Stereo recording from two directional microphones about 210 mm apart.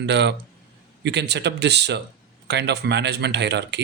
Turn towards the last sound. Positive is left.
turn(degrees=-55)  # may be behind; listen again after turning